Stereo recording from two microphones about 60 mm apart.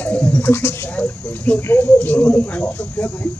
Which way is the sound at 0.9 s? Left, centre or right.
Left.